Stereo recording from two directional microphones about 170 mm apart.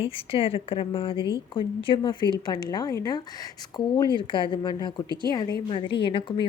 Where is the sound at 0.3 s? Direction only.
35° left (ahead or behind).